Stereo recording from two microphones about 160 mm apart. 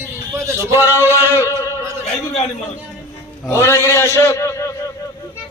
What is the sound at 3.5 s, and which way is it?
A man's voice, 15° left (ahead or behind).